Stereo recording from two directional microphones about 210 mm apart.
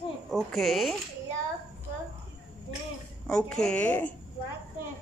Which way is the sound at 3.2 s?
5° left (ahead or behind).